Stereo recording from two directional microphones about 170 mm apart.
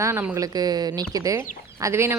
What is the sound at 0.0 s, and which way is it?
Speech, 15° right (ahead or behind).